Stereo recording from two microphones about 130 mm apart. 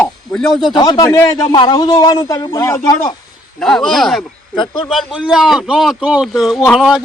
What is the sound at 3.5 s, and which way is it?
A man's voice, 5° left (ahead or behind).